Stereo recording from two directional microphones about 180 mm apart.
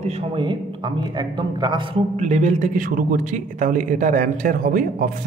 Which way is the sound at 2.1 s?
40° right (ahead or behind).